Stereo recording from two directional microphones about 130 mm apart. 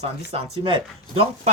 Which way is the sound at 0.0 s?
55° right (ahead or behind).